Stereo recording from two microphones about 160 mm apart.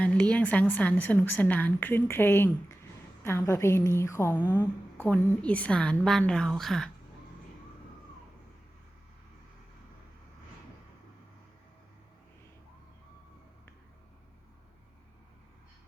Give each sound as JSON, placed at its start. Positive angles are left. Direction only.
{"t": 0.0, "sound": "a woman's voice", "side_deg": 5}